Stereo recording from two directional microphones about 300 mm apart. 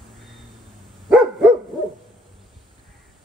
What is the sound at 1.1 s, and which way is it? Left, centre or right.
Dog, centre.